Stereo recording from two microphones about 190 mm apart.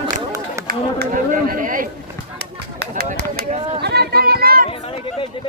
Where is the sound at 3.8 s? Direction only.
60° right (ahead or behind).